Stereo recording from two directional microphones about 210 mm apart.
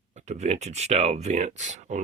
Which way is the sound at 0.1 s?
35° right (ahead or behind).